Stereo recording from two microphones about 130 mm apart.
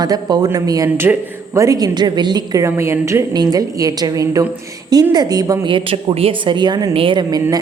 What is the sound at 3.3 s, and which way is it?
A woman's voice, 30° right (ahead or behind).